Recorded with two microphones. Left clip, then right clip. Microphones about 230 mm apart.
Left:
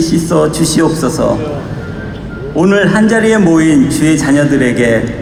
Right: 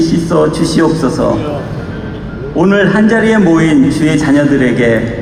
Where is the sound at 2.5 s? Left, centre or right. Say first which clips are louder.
Even; left.